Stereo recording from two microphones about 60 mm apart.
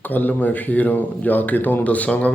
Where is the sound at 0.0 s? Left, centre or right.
Left.